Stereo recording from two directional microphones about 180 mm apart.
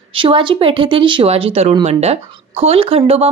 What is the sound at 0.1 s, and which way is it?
A woman's voice, 30° right (ahead or behind).